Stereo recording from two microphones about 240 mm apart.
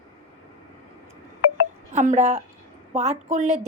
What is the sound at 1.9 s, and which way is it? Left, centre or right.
A woman's voice, right.